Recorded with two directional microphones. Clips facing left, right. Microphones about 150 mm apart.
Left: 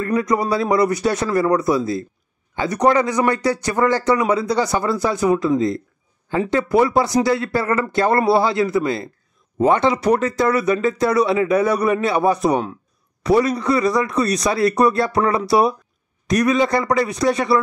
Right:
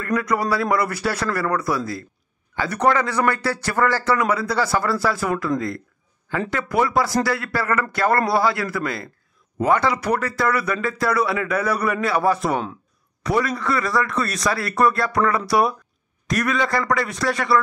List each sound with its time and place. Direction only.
0.0 s speech: 25° left (ahead or behind)
6.5 s speech: 25° left (ahead or behind)